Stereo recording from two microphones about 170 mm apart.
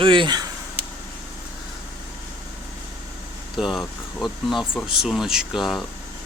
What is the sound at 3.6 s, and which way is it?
Speech, centre (ahead or behind).